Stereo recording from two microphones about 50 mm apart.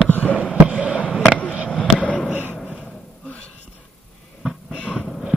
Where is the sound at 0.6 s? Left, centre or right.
Right.